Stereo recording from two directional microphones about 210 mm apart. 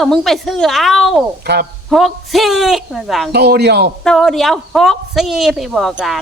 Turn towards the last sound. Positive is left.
turn(degrees=0)  # may be behind; listen again after turning